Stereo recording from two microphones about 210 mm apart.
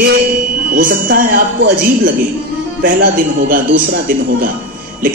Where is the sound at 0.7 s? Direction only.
45° right (ahead or behind).